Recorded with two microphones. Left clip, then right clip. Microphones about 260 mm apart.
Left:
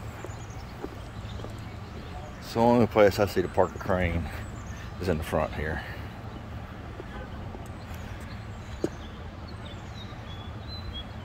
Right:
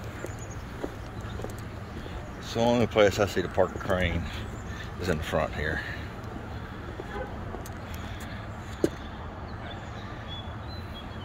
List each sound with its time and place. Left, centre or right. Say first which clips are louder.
2.5 s speech: left 2 dB; left